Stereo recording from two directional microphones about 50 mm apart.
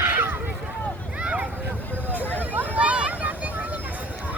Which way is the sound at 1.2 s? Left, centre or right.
Right.